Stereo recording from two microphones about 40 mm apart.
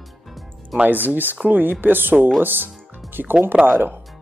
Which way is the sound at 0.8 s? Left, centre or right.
Right.